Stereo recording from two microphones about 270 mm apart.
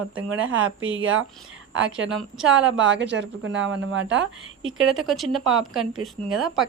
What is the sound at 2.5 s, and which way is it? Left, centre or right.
Speech, right.